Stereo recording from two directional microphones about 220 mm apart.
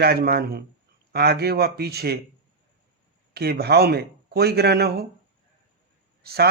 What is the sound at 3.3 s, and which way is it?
A man's voice, 45° right (ahead or behind).